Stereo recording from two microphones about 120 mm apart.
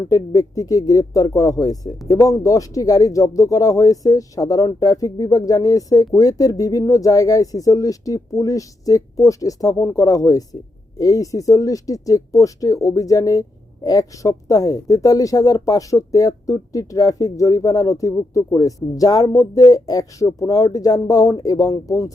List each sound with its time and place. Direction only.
0.1 s speech: 30° left (ahead or behind)